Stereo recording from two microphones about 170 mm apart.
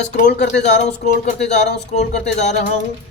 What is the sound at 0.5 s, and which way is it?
Speech, 85° left.